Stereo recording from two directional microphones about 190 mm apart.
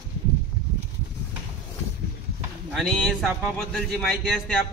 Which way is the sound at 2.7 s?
Centre (ahead or behind).